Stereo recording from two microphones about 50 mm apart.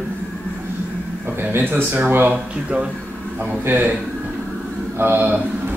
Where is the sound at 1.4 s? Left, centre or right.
Right.